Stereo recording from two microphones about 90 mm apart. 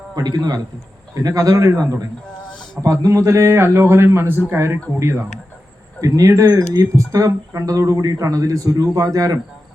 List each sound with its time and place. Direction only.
0.2 s a man's voice: 50° right (ahead or behind)